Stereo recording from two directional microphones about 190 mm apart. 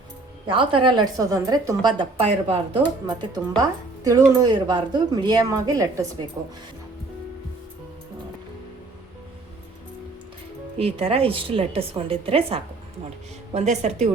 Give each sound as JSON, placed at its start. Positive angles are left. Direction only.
{"t": 0.4, "sound": "a woman's voice", "side_deg": -25}
{"t": 10.8, "sound": "a woman's voice", "side_deg": -30}